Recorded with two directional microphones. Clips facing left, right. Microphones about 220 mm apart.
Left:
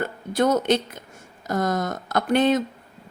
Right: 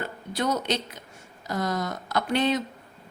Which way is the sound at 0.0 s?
50° left (ahead or behind).